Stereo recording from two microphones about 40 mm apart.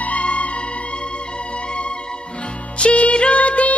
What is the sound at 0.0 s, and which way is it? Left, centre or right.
Music, left.